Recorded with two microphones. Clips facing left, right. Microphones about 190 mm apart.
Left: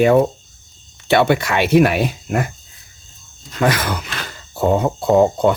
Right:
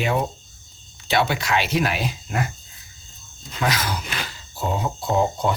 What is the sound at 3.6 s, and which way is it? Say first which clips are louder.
Speech: left 6 dB; 55° left (ahead or behind).